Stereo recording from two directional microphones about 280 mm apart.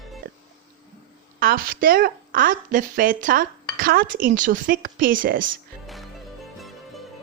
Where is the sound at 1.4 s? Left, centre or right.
Right.